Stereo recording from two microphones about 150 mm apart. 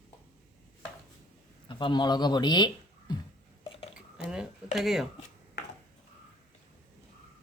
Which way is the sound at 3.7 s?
40° left (ahead or behind).